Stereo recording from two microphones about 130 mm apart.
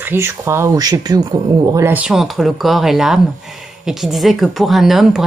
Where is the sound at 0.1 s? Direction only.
20° right (ahead or behind).